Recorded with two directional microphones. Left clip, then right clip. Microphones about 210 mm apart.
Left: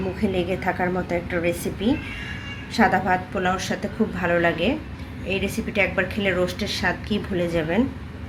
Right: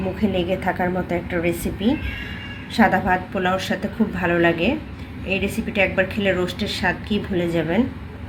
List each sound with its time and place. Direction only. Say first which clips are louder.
0.2 s a woman's voice: right 2 dB; 15° right (ahead or behind)